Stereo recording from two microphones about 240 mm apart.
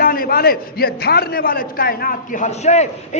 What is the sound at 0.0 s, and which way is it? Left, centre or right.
A man's voice, left.